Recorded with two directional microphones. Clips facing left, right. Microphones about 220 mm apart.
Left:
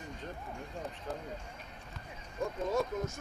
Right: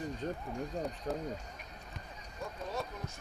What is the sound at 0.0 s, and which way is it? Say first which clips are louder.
Speech: right 6 dB; 35° right (ahead or behind).